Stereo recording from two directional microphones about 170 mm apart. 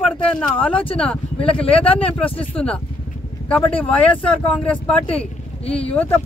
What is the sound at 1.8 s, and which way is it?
Speech, 35° left (ahead or behind).